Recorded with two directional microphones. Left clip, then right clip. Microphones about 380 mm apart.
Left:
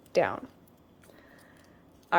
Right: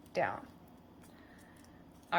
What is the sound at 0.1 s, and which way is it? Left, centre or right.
Speech, centre.